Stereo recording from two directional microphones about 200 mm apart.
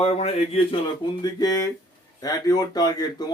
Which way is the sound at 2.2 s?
20° left (ahead or behind).